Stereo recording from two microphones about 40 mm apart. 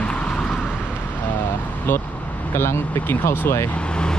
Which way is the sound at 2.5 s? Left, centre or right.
Left.